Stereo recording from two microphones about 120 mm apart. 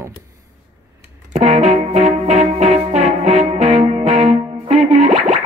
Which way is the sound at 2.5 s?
70° right (ahead or behind).